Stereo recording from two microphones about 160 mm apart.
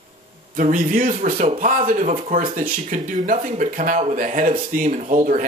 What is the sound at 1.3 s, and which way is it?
Speech, 40° right (ahead or behind).